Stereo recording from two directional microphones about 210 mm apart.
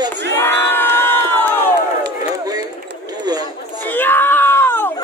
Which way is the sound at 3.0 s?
20° right (ahead or behind).